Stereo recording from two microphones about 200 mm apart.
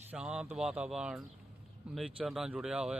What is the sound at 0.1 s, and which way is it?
Speech, 5° right (ahead or behind).